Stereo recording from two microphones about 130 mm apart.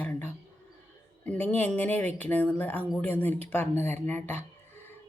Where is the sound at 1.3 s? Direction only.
10° left (ahead or behind).